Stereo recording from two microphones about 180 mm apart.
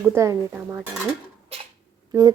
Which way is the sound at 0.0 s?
15° right (ahead or behind).